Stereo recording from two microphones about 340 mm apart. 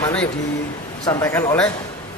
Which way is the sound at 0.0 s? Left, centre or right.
Centre.